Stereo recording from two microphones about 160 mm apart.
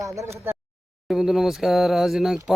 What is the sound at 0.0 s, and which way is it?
Speech, 20° right (ahead or behind).